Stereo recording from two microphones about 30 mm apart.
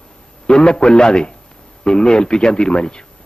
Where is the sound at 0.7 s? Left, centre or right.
Left.